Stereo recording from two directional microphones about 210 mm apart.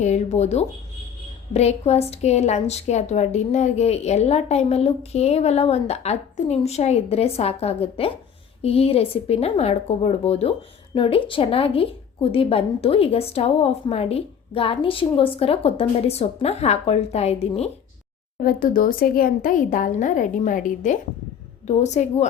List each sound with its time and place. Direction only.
0.0 s a woman's voice: 35° left (ahead or behind)
18.4 s a woman's voice: 40° left (ahead or behind)